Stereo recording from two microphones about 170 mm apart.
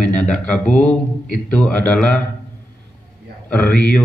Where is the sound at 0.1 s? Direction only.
5° left (ahead or behind).